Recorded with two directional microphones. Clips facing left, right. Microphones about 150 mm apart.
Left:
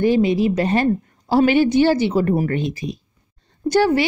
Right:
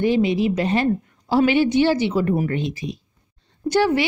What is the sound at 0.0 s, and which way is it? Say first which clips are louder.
A woman's voice: left 2 dB; 45° left (ahead or behind).